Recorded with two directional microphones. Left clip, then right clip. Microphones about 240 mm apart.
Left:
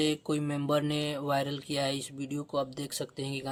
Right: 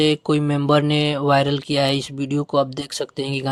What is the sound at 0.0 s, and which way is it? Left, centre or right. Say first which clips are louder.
Mantra: right 12 dB; right.